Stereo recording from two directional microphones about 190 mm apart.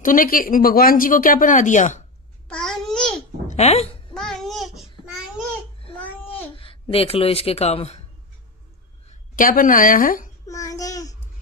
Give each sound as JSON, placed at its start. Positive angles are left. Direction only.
{"t": 0.0, "sound": "speech", "side_deg": 45}
{"t": 2.5, "sound": "babbling", "side_deg": 5}
{"t": 3.4, "sound": "speech", "side_deg": 35}
{"t": 4.1, "sound": "child singing", "side_deg": 5}
{"t": 5.9, "sound": "child singing", "side_deg": 10}
{"t": 6.5, "sound": "speech", "side_deg": 30}
{"t": 9.3, "sound": "speech", "side_deg": 45}
{"t": 10.4, "sound": "child singing", "side_deg": 15}